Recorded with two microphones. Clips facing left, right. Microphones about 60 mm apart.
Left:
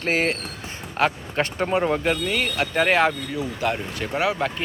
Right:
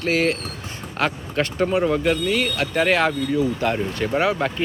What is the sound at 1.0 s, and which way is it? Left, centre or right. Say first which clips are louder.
Speech: even; centre.